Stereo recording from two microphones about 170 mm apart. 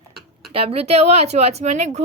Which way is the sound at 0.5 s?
35° right (ahead or behind).